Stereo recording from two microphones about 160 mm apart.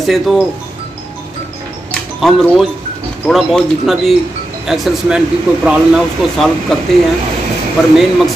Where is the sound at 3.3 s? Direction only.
Centre (ahead or behind).